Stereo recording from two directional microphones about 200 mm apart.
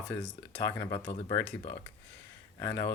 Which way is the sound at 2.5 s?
10° left (ahead or behind).